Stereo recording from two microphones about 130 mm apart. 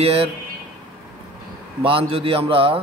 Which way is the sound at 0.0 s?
50° right (ahead or behind).